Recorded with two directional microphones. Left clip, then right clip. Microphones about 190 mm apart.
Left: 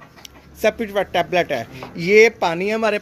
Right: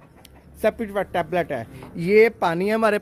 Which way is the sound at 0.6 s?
5° right (ahead or behind).